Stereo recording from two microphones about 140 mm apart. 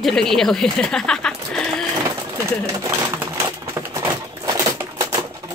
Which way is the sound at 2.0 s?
20° right (ahead or behind).